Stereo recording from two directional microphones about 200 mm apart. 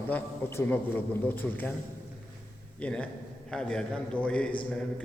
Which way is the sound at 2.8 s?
5° left (ahead or behind).